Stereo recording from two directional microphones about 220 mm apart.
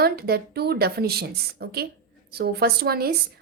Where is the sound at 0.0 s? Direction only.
45° right (ahead or behind).